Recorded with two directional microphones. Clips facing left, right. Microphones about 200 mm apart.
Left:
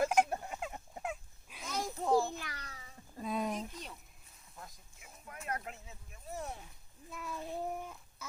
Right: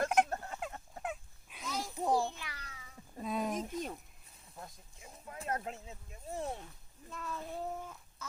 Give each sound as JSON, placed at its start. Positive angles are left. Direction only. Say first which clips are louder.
{"t": 0.0, "sound": "fowl", "louder": "left 1 dB", "side_deg": 0}
{"t": 0.3, "sound": "fowl", "louder": "left 1 dB", "side_deg": 15}
{"t": 1.0, "sound": "dog", "louder": "even", "side_deg": 0}
{"t": 1.8, "sound": "children playing", "louder": "left 2 dB", "side_deg": -15}
{"t": 2.4, "sound": "cat", "louder": "left 2 dB", "side_deg": 40}
{"t": 3.2, "sound": "a sound", "louder": "right 1 dB", "side_deg": 0}
{"t": 3.7, "sound": "a sound", "louder": "right 9 dB", "side_deg": -50}
{"t": 4.9, "sound": "a sound", "louder": "right 3 dB", "side_deg": -30}
{"t": 7.1, "sound": "child singing", "louder": "left 1 dB", "side_deg": 10}